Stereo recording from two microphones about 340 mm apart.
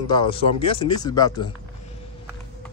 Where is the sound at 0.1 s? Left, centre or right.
Centre.